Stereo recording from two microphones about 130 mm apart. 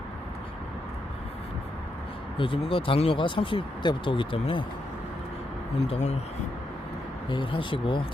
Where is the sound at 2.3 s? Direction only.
40° left (ahead or behind).